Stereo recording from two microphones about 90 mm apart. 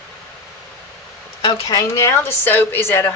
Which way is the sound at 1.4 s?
55° left (ahead or behind).